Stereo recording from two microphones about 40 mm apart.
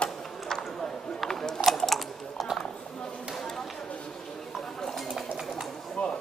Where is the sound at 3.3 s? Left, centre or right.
Centre.